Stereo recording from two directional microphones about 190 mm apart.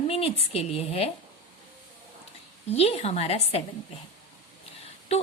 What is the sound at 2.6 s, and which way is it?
Speech, 35° left (ahead or behind).